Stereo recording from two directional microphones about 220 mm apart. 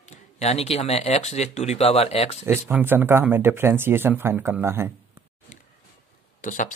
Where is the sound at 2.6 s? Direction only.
10° right (ahead or behind).